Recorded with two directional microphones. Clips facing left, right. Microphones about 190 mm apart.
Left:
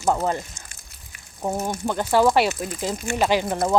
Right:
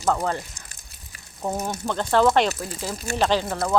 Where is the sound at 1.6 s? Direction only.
10° left (ahead or behind).